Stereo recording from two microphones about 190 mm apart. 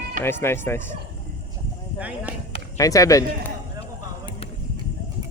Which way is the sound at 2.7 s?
15° left (ahead or behind).